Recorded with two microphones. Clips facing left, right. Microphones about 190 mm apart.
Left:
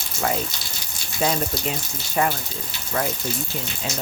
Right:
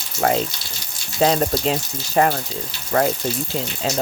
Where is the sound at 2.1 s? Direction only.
50° right (ahead or behind).